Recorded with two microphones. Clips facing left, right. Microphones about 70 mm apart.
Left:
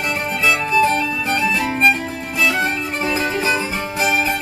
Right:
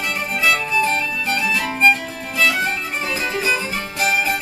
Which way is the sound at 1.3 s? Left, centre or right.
Left.